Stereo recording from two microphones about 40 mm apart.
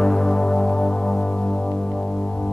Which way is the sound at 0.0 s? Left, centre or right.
Centre.